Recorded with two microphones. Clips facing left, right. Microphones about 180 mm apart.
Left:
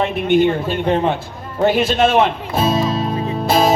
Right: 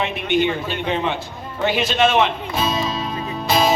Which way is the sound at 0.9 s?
45° left (ahead or behind).